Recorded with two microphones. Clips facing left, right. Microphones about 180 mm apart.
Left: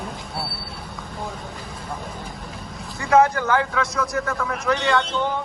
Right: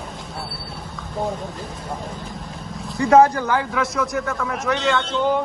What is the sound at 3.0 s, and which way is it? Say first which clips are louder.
Speech: right 3 dB; 35° right (ahead or behind).